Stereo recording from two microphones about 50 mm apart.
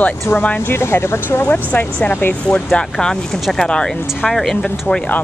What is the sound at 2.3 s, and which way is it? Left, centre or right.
Speech, left.